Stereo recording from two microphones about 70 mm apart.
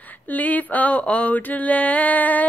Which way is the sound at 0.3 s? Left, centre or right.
Left.